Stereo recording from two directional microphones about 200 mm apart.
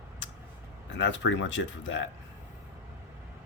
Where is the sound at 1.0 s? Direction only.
70° left (ahead or behind).